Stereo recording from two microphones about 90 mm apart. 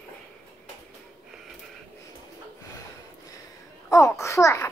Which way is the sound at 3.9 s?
35° left (ahead or behind).